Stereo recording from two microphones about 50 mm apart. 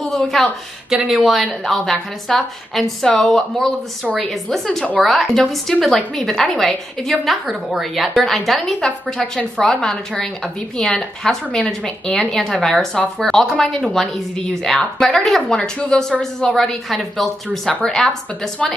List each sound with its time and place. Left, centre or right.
0.1 s a woman's voice: centre